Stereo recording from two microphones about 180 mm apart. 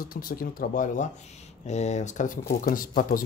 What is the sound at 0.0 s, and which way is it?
Speech, 55° left (ahead or behind).